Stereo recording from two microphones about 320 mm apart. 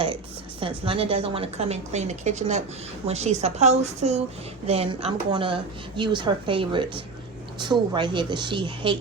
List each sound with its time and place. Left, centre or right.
0.6 s a woman's voice: centre